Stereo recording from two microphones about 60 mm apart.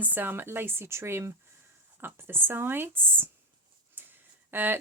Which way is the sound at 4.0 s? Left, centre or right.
Right.